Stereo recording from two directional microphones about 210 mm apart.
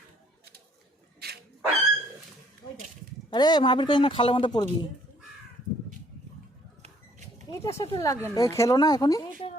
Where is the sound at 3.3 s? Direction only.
20° left (ahead or behind).